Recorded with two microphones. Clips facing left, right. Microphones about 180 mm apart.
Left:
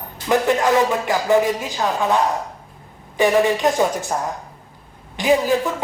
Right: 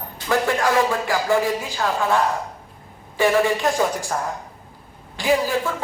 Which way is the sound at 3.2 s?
20° left (ahead or behind).